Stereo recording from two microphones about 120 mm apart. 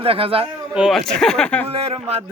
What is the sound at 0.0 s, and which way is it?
Speech, 50° right (ahead or behind).